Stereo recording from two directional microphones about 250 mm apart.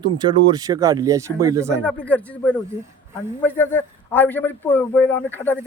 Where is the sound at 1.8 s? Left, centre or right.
Centre.